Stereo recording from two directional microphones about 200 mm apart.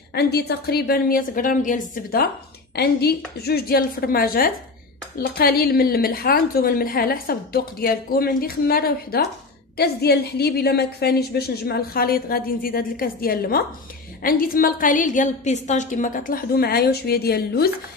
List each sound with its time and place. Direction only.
0.1 s a woman's voice: 50° left (ahead or behind)
2.7 s a woman's voice: 55° left (ahead or behind)